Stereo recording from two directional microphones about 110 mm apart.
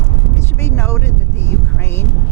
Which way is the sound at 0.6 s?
25° left (ahead or behind).